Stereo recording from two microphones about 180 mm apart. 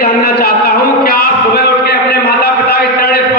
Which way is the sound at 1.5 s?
65° left (ahead or behind).